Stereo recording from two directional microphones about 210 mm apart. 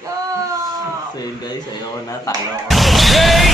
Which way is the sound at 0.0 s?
15° right (ahead or behind).